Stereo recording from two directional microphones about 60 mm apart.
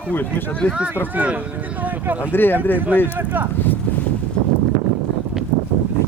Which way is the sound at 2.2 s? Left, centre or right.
Left.